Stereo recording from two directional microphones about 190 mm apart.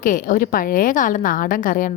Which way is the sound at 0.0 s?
45° left (ahead or behind).